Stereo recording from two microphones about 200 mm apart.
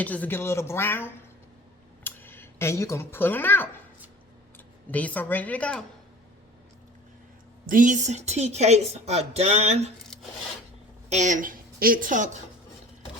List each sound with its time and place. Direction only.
0.0 s speech: 10° left (ahead or behind)
4.9 s speech: 10° left (ahead or behind)
7.7 s a woman's voice: 40° right (ahead or behind)
11.1 s a woman's voice: 35° right (ahead or behind)